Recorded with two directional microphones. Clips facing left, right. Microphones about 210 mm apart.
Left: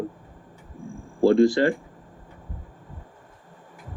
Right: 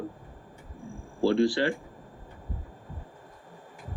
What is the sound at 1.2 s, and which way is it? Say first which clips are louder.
Speech: left 6 dB; 45° left (ahead or behind).